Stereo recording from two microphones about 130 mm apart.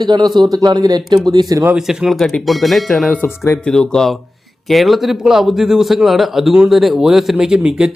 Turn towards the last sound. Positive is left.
turn(degrees=-10)  # may be behind; listen again after turning